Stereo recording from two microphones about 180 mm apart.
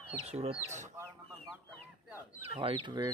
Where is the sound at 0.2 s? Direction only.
35° right (ahead or behind).